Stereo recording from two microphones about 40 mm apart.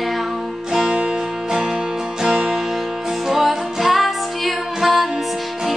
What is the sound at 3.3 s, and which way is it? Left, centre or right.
Music, centre.